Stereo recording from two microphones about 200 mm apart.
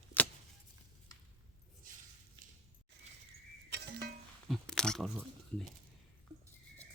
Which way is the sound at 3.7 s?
55° right (ahead or behind).